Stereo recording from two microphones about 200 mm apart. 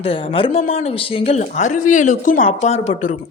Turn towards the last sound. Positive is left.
turn(degrees=35)  # may be behind; listen again after turning